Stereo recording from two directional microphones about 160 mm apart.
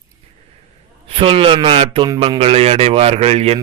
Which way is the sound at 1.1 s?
35° right (ahead or behind).